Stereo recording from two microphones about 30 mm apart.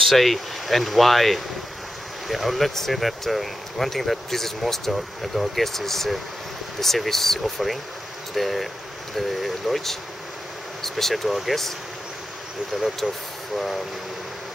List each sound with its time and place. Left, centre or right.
0.0 s speech: centre
2.7 s speech: centre
11.2 s speech: centre
12.7 s speech: right